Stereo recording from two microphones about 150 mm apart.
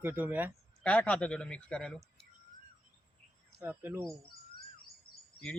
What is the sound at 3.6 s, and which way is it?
Speech, 15° right (ahead or behind).